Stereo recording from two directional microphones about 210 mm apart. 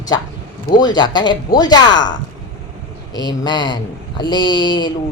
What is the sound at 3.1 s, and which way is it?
Speech, 20° left (ahead or behind).